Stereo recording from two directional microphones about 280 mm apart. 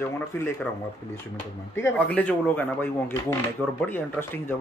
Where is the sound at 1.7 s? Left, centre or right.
Centre.